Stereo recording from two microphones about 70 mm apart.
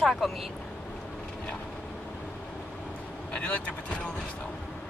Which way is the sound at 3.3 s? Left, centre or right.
Centre.